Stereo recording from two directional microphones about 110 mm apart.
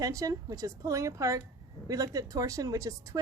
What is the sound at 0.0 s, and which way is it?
Speech, 30° right (ahead or behind).